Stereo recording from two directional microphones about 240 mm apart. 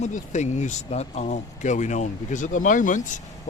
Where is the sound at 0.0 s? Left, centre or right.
Left.